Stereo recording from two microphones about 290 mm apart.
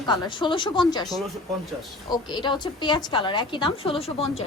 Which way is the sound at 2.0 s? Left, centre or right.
Centre.